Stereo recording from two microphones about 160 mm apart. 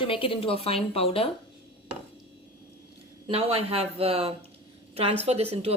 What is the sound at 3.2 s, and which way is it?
Speech, 35° right (ahead or behind).